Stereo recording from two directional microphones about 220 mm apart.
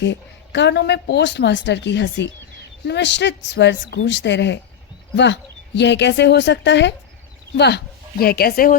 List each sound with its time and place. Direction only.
0.0 s speech: 55° left (ahead or behind)